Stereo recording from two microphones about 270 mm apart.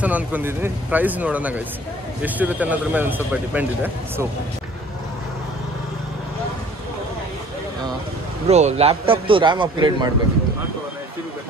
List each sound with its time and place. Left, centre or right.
0.0 s speech: centre
8.5 s a man's voice: right